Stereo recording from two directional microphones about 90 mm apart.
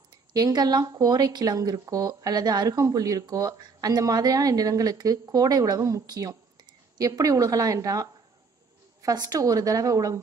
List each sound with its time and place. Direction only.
0.3 s speech: 45° right (ahead or behind)
2.8 s a woman's voice: 40° right (ahead or behind)